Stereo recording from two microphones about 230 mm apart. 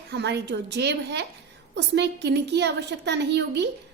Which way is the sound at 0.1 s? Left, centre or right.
Right.